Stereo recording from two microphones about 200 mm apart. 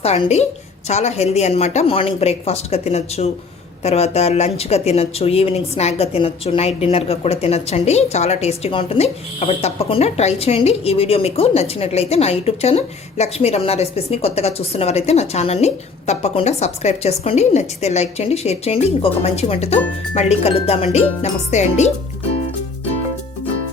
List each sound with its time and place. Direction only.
0.0 s speech: 30° left (ahead or behind)